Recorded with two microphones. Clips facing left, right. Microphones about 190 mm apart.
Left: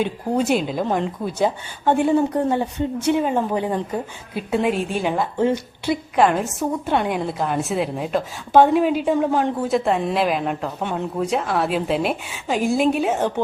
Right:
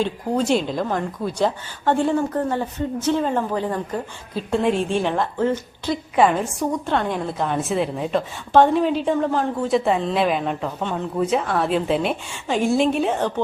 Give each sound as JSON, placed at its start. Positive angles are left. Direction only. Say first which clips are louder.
{"t": 0.0, "sound": "a woman's voice", "louder": "left 1 dB", "side_deg": 10}
{"t": 6.1, "sound": "a woman's voice", "louder": "right 1 dB", "side_deg": 0}
{"t": 6.9, "sound": "a woman's voice", "louder": "left 1 dB", "side_deg": 15}